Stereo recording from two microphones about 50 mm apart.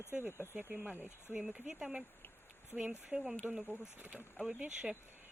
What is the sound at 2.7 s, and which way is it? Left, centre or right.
Speech, right.